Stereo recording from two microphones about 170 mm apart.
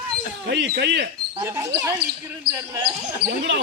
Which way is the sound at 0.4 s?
90° right.